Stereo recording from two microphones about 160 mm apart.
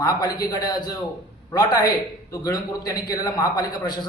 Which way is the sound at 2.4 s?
25° left (ahead or behind).